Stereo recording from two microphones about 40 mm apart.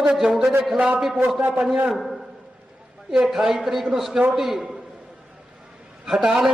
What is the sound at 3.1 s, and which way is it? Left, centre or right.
A man's voice, centre.